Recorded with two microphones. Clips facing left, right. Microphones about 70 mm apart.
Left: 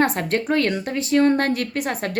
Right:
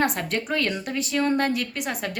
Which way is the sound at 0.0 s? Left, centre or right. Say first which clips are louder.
Left 4 dB; left.